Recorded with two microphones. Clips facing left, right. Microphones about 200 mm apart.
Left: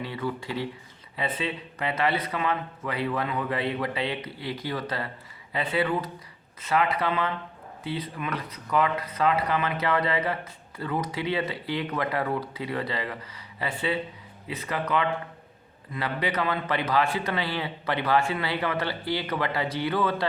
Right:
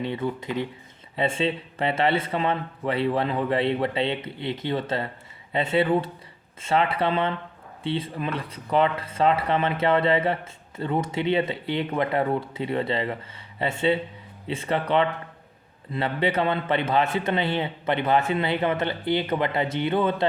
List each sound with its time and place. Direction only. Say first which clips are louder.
0.0 s speech: right 4 dB; 20° right (ahead or behind)